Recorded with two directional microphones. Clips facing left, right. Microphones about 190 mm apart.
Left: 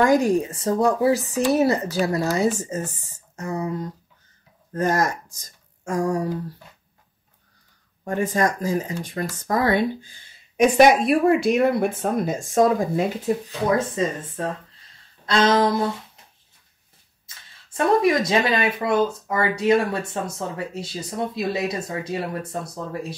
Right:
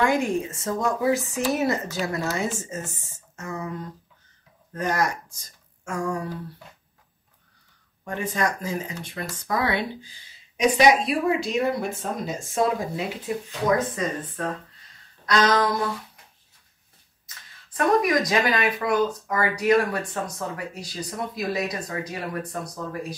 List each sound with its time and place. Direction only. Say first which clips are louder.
0.0 s speech: left 5 dB; 40° left (ahead or behind)
4.7 s speech: left 4 dB; 45° left (ahead or behind)
8.0 s speech: left 5 dB; 45° left (ahead or behind)
13.9 s speech: left 4 dB; 25° left (ahead or behind)
17.3 s a sound: right 1 dB; 30° left (ahead or behind)
17.6 s speech: left 3 dB; 25° left (ahead or behind)